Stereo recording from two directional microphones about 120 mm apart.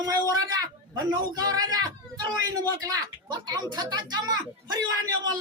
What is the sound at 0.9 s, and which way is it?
A man's voice, 30° right (ahead or behind).